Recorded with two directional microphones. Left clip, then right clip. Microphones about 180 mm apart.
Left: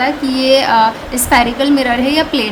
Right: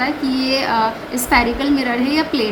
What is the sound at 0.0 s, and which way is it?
A woman's voice, 30° left (ahead or behind).